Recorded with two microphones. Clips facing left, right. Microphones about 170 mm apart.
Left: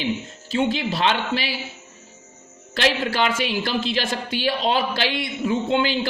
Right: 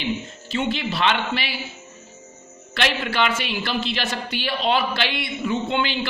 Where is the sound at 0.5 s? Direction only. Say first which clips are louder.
Left 2 dB; 45° left (ahead or behind).